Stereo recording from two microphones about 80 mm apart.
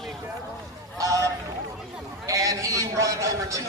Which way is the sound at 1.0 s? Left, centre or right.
Right.